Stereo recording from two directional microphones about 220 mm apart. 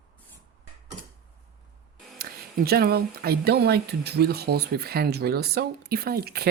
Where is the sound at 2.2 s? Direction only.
45° right (ahead or behind).